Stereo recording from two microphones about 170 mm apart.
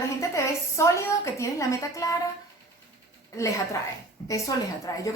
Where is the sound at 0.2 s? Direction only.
15° left (ahead or behind).